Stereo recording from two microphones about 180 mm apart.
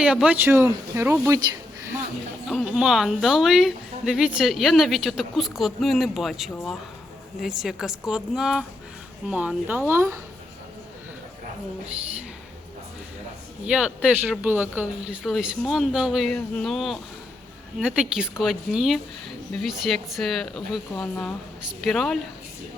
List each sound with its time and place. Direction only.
0.0 s speech: 5° right (ahead or behind)
2.5 s a woman's voice: centre (ahead or behind)
13.7 s a woman's voice: 5° right (ahead or behind)